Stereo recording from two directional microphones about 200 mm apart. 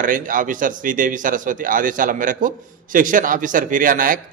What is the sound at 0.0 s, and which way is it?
A man's voice, 40° right (ahead or behind).